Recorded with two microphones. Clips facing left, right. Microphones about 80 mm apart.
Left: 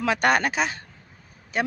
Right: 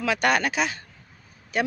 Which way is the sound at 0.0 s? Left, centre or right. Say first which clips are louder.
Left 1 dB; left.